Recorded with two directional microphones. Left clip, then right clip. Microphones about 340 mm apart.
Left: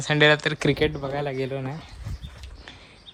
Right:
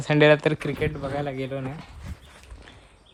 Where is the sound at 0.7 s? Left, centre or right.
Left.